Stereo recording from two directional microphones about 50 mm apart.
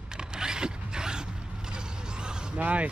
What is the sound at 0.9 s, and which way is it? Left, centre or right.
Zipper, centre.